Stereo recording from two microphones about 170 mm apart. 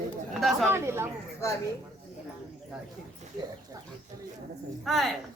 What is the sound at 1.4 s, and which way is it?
Speech, 15° left (ahead or behind).